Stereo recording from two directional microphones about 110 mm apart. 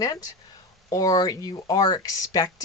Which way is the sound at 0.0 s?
35° left (ahead or behind).